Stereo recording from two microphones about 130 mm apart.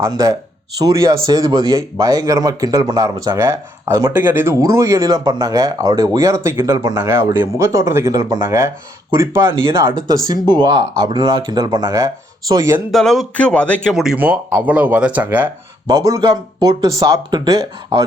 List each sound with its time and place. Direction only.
0.0 s a man's voice: 25° right (ahead or behind)
10.4 s speech: 35° right (ahead or behind)
12.9 s speech: centre (ahead or behind)
13.9 s speech: 5° right (ahead or behind)
15.9 s a man's voice: 25° right (ahead or behind)